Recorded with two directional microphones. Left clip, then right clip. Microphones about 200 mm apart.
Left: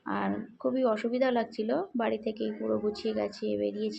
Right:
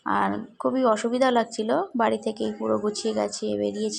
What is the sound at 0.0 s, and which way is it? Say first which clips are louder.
Speech: right 8 dB; 15° right (ahead or behind).